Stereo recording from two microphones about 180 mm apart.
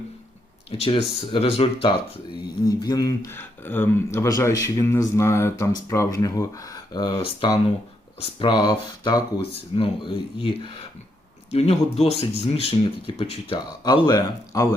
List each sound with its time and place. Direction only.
0.7 s speech: 30° left (ahead or behind)
2.6 s speech: 20° left (ahead or behind)